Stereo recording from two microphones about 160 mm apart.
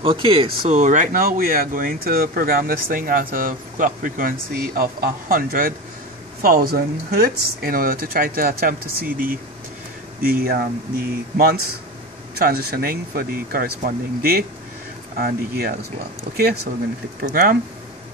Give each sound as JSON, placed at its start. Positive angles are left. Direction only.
{"t": 0.0, "sound": "speech", "side_deg": -35}
{"t": 17.2, "sound": "speech", "side_deg": -70}